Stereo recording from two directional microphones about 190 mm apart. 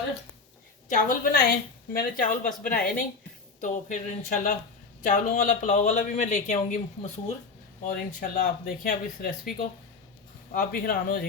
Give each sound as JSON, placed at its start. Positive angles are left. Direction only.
{"t": 0.9, "sound": "speech", "side_deg": 45}
{"t": 7.9, "sound": "speech", "side_deg": 45}
{"t": 10.5, "sound": "speech", "side_deg": 50}